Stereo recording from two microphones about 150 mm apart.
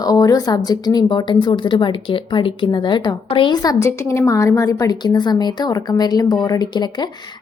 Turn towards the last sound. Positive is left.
turn(degrees=30)  # may be behind; listen again after turning